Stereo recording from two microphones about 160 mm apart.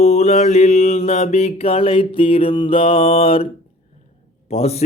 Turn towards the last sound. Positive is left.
turn(degrees=40)  # may be behind; listen again after turning